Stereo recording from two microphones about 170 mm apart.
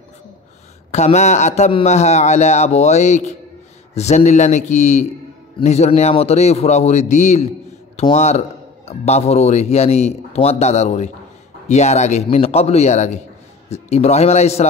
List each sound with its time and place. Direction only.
0.9 s a man's voice: 40° left (ahead or behind)